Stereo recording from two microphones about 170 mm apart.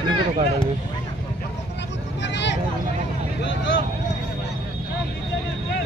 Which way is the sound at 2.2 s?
90° left.